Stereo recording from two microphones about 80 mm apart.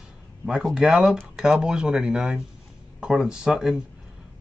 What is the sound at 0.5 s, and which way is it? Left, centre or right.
Speech, centre.